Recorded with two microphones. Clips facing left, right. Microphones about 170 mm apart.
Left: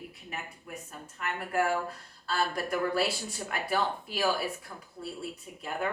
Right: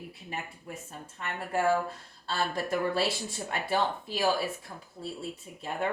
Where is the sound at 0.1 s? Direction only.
30° right (ahead or behind).